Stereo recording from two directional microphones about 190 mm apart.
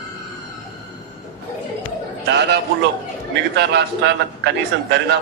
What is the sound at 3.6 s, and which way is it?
A man's voice, 65° right (ahead or behind).